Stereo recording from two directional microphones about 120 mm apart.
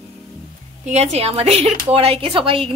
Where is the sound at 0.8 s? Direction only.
65° right (ahead or behind); by 2.6 s 50° right (ahead or behind).